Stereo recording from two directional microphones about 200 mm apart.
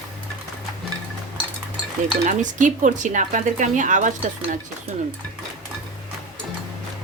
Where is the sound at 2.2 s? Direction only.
40° right (ahead or behind).